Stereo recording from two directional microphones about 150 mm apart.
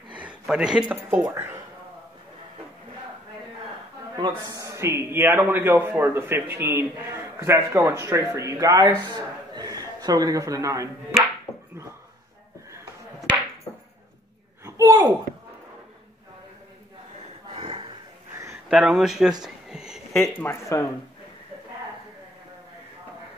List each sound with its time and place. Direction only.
0.1 s speech: 10° right (ahead or behind)
4.1 s a man's voice: 25° right (ahead or behind)
14.6 s a sound: 20° right (ahead or behind)
17.6 s chuckle: 40° right (ahead or behind)
18.7 s speech: 5° right (ahead or behind)
19.4 s a sound: 5° right (ahead or behind)
20.4 s speech: 20° left (ahead or behind)